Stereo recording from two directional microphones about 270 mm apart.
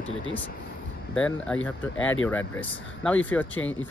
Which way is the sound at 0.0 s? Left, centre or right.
Left.